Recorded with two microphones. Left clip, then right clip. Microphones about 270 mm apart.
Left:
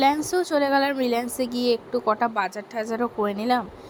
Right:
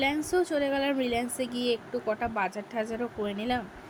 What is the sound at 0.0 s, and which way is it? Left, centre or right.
Speech, centre.